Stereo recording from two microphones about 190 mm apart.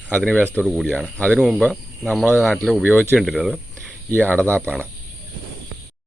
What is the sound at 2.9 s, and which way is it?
Speech, 10° left (ahead or behind).